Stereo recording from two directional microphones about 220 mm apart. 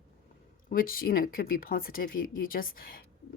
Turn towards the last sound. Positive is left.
turn(degrees=40)  # may be behind; listen again after turning